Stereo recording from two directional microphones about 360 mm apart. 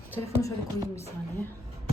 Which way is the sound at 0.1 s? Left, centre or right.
Centre.